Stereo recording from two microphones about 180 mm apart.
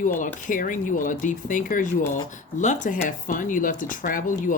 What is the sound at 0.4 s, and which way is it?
Speech, 45° left (ahead or behind).